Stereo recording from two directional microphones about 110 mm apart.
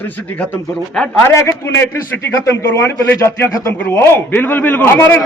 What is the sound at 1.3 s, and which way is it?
A man's voice, 25° left (ahead or behind).